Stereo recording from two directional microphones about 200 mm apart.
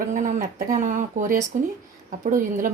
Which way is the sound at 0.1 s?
40° right (ahead or behind).